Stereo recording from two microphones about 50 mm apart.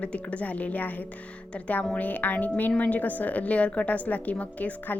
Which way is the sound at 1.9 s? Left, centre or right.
Left.